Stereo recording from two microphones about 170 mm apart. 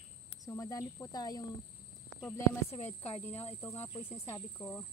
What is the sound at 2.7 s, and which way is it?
Speech, 40° left (ahead or behind).